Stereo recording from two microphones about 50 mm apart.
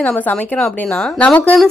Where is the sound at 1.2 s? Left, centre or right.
Left.